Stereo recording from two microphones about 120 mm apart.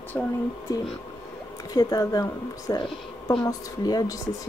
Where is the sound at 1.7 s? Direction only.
30° left (ahead or behind).